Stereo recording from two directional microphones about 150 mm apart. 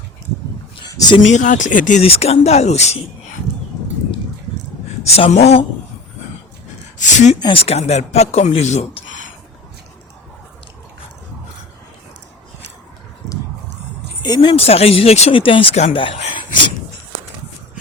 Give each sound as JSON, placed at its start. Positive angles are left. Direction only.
{"t": 0.8, "sound": "a sound", "side_deg": 30}
{"t": 1.3, "sound": "speech", "side_deg": 55}
{"t": 2.0, "sound": "speech", "side_deg": 40}
{"t": 5.0, "sound": "speech", "side_deg": 45}
{"t": 7.0, "sound": "speech", "side_deg": 50}
{"t": 7.3, "sound": "speech", "side_deg": 30}
{"t": 7.6, "sound": "speech", "side_deg": 45}
{"t": 14.2, "sound": "speech", "side_deg": 30}